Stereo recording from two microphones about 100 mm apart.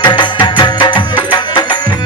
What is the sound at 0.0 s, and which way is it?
Music, 50° left (ahead or behind).